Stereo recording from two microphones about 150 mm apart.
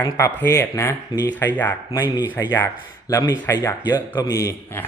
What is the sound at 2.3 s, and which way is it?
A man's voice, 20° left (ahead or behind).